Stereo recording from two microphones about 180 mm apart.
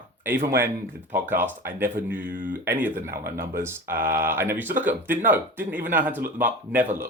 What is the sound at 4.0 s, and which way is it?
Speech, 50° right (ahead or behind).